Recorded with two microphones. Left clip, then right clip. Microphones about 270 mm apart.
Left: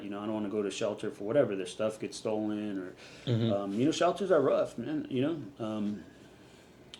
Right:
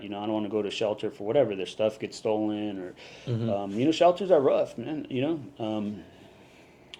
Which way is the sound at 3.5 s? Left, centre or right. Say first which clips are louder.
Right 5 dB; right.